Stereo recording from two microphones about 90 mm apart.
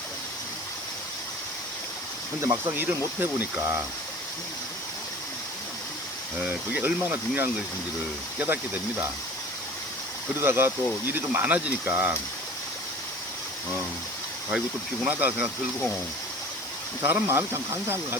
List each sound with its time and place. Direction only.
2.4 s speech: 30° right (ahead or behind)
6.7 s speech: 20° right (ahead or behind)
10.4 s speech: 25° right (ahead or behind)
15.0 s speech: 20° right (ahead or behind)
17.0 s speech: 25° right (ahead or behind)